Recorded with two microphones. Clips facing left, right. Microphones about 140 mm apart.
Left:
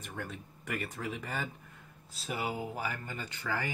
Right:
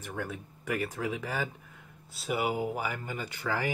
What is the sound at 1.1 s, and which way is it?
Speech, 90° right.